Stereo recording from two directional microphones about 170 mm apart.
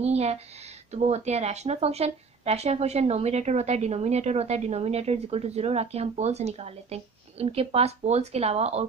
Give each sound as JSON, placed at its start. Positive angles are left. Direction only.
{"t": 0.0, "sound": "a woman's voice", "side_deg": -40}